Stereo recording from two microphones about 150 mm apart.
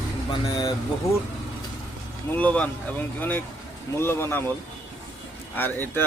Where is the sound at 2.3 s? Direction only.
10° left (ahead or behind).